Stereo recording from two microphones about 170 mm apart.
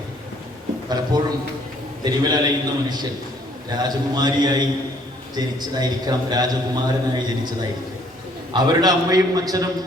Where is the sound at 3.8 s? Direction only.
25° right (ahead or behind).